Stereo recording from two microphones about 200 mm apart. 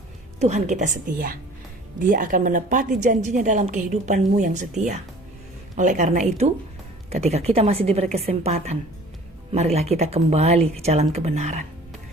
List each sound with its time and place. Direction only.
0.3 s a woman's voice: 35° right (ahead or behind)